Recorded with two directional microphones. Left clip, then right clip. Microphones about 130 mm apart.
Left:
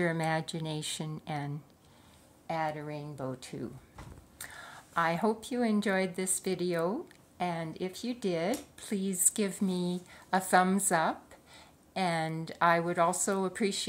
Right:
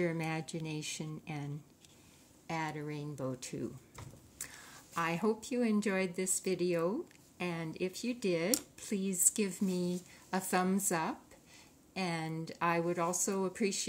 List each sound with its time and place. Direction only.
0.0 s speech: centre (ahead or behind)
2.4 s speech: 20° right (ahead or behind)
4.4 s speech: 5° right (ahead or behind)